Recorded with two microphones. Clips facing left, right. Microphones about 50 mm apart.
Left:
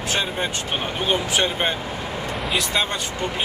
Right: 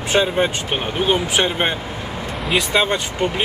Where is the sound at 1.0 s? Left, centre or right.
Right.